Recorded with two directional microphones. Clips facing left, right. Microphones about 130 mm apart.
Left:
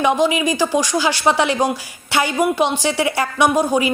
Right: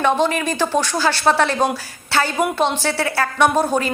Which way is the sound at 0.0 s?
10° left (ahead or behind).